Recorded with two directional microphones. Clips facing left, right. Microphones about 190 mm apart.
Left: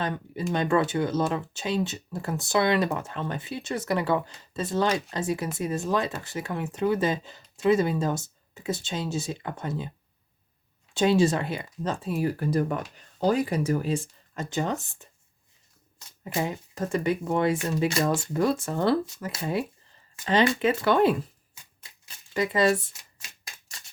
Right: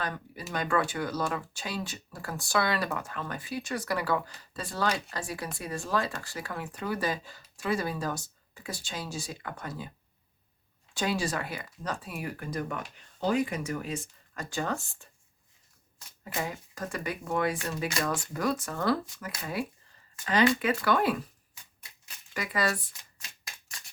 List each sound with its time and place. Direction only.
0.0 s speech: 25° left (ahead or behind)
10.9 s speech: 25° left (ahead or behind)
16.2 s speech: 25° left (ahead or behind)